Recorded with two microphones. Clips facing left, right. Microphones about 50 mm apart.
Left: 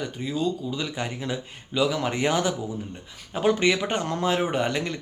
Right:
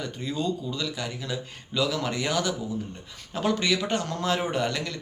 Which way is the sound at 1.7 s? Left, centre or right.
Centre.